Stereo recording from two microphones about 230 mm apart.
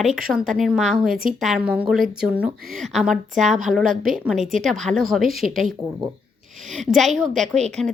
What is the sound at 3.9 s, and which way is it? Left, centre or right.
Speech, right.